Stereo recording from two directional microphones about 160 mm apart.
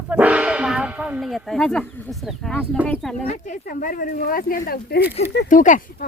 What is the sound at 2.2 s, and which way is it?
Speech, 5° left (ahead or behind).